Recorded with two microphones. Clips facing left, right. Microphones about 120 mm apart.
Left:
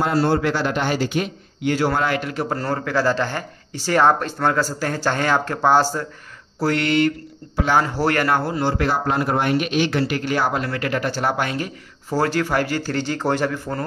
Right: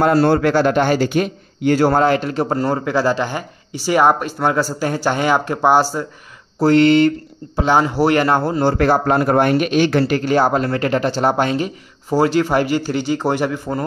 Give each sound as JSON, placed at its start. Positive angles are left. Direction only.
{"t": 0.0, "sound": "a man's voice", "side_deg": -60}
{"t": 6.6, "sound": "speech", "side_deg": -30}
{"t": 8.7, "sound": "speech", "side_deg": -50}